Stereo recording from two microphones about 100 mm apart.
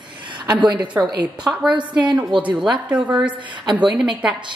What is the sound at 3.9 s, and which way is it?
Speech, 5° right (ahead or behind).